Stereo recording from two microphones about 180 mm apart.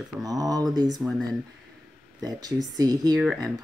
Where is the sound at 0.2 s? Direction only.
20° right (ahead or behind).